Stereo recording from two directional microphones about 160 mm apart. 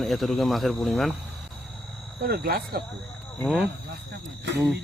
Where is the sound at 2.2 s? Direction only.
75° right (ahead or behind).